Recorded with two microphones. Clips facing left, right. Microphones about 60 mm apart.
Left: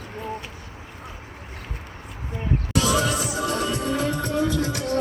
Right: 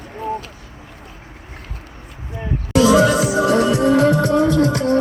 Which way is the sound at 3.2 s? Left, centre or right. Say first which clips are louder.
Right 10 dB; right.